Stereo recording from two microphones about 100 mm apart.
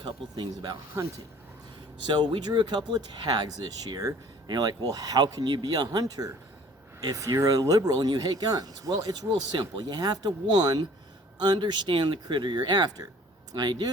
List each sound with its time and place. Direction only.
0.0 s speech: 50° right (ahead or behind)
2.0 s speech: 50° right (ahead or behind)